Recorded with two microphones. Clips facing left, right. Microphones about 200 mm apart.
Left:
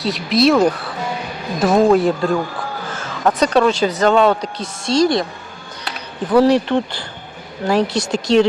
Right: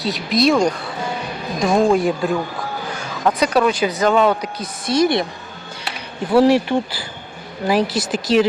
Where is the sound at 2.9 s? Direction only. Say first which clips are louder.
Left 1 dB; 15° right (ahead or behind).